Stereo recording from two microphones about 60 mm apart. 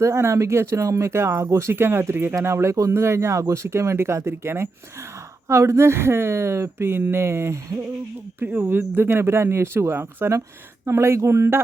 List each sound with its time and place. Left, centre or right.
0.0 s speech: right
1.7 s speech: right
8.6 s speech: right